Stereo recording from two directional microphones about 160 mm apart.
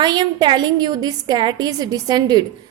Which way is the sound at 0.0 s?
25° right (ahead or behind).